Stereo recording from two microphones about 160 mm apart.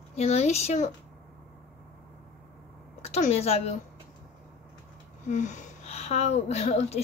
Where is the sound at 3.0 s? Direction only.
45° left (ahead or behind).